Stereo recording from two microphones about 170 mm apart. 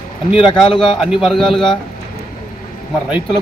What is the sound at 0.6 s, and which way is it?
Speech, 30° left (ahead or behind).